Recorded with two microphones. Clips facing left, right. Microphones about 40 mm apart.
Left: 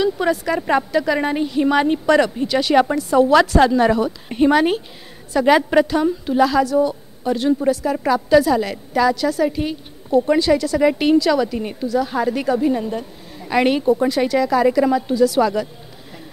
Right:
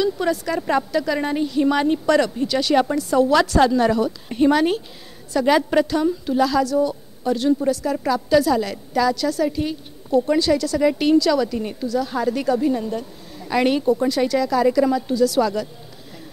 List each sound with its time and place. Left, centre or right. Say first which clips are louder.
0.0 s a woman's voice: left 2 dB; left